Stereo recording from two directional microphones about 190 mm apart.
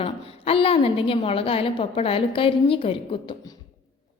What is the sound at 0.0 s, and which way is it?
A woman's voice, 30° left (ahead or behind).